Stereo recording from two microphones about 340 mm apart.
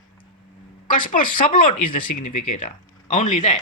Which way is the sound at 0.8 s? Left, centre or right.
Left.